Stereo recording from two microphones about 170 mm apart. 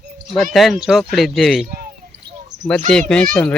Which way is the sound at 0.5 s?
Centre (ahead or behind).